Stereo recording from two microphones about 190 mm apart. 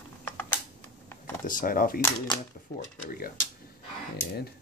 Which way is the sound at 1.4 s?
45° left (ahead or behind).